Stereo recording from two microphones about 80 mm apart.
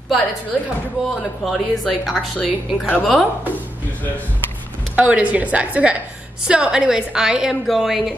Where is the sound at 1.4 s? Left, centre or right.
Centre.